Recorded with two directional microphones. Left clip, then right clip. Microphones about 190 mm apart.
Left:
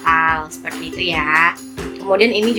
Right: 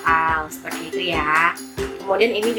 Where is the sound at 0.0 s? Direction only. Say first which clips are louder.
Left 3 dB; 20° left (ahead or behind).